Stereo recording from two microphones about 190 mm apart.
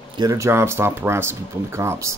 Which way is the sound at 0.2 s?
15° right (ahead or behind).